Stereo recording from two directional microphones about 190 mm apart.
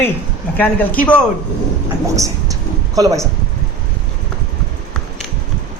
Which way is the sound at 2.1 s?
15° right (ahead or behind).